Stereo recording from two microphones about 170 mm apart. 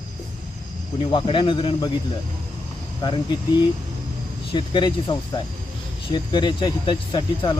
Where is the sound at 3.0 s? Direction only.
25° left (ahead or behind).